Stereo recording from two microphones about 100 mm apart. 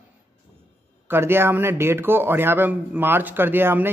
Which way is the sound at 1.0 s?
25° right (ahead or behind).